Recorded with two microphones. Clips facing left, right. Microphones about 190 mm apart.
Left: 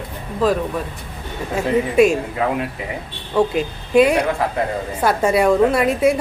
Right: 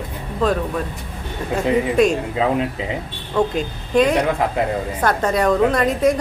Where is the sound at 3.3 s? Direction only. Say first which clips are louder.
Left 2 dB; 5° left (ahead or behind).